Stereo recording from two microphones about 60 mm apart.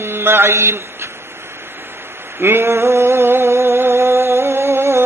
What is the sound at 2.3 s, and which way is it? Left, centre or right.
Mantra, right.